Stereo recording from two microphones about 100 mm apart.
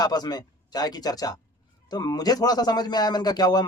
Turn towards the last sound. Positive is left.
turn(degrees=45)  # may be behind; listen again after turning